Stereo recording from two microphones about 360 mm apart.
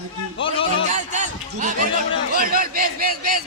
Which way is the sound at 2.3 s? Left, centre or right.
Right.